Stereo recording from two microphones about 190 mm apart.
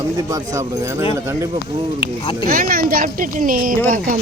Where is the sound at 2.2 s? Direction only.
25° left (ahead or behind).